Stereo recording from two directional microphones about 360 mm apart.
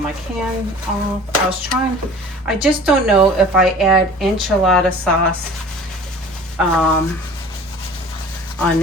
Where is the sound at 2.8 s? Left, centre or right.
Centre.